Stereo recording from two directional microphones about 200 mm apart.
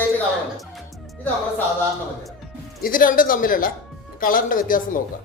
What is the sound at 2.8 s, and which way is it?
Speech, 45° left (ahead or behind).